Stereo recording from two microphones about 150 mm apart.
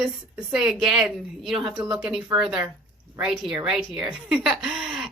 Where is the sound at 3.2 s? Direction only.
5° right (ahead or behind).